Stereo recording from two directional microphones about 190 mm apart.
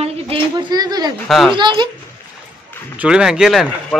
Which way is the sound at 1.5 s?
25° right (ahead or behind).